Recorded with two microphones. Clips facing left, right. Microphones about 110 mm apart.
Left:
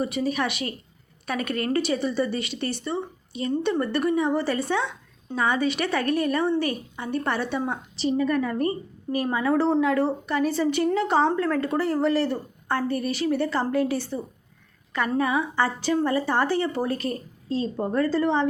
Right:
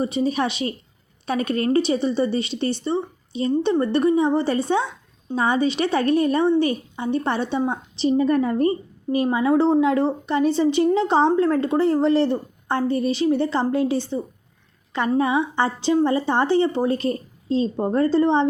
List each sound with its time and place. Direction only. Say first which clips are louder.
0.0 s speech: right 4 dB; 25° right (ahead or behind)
15.2 s speech: right 2 dB; 25° right (ahead or behind)